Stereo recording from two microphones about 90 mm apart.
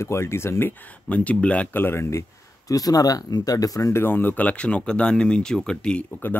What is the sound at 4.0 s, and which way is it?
Speech, 20° left (ahead or behind).